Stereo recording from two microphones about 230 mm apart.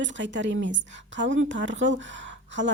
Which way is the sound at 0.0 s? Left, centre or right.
Right.